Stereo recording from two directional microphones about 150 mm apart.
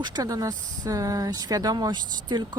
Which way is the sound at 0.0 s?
25° right (ahead or behind).